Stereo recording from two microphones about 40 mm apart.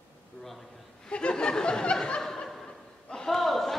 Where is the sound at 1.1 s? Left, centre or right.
Left.